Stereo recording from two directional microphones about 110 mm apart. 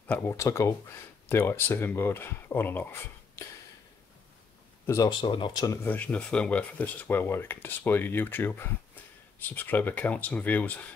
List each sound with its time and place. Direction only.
0.1 s speech: 25° left (ahead or behind)
4.8 s speech: 30° left (ahead or behind)
5.2 s speech: 45° left (ahead or behind)
5.9 s speech: 15° left (ahead or behind)